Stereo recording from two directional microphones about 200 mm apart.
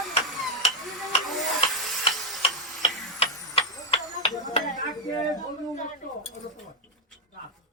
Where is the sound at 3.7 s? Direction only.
20° left (ahead or behind).